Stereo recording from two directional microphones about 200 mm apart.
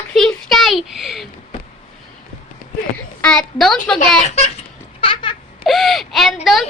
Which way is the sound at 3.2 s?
5° left (ahead or behind).